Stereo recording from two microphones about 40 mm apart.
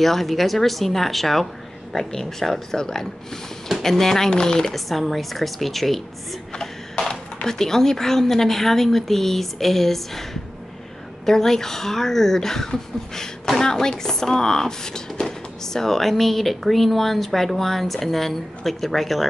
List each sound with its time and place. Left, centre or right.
0.0 s speech: centre
4.7 s speech: centre
6.5 s a sound: centre
7.4 s speech: centre
11.2 s speech: centre